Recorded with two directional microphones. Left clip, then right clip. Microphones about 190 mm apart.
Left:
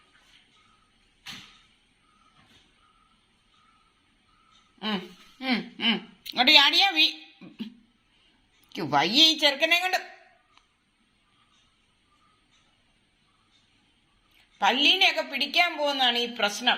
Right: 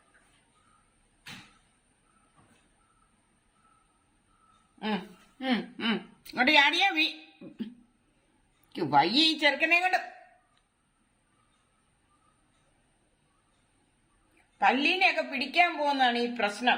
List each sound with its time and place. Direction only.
5.4 s a sound: 20° right (ahead or behind)
8.7 s a woman's voice: 5° right (ahead or behind)
14.6 s a woman's voice: centre (ahead or behind)